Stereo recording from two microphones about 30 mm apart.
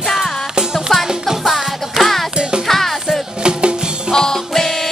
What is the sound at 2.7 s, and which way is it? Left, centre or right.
Music, centre.